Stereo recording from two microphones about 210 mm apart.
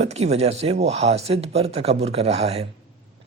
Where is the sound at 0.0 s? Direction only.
30° right (ahead or behind).